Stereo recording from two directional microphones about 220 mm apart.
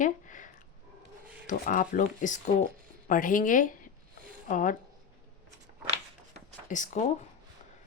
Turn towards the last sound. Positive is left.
turn(degrees=35)  # may be behind; listen again after turning